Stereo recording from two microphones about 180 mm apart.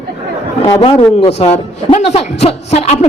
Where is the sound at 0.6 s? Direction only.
25° left (ahead or behind).